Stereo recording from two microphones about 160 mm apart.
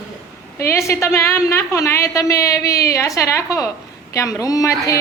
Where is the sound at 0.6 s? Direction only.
20° left (ahead or behind).